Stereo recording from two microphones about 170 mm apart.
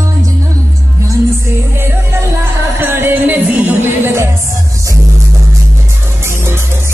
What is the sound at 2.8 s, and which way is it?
Music, 15° right (ahead or behind).